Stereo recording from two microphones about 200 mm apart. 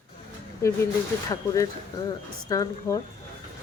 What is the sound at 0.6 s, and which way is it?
Speech, 15° left (ahead or behind).